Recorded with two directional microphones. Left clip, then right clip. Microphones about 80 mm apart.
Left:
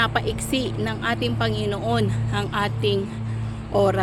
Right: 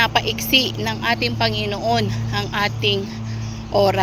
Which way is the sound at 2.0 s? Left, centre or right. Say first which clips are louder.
Right 2 dB; left.